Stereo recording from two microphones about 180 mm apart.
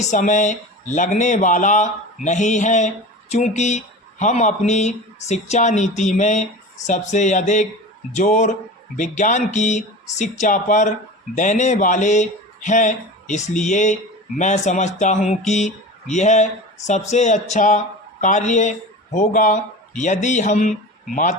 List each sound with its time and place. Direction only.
0.0 s speech: 40° left (ahead or behind)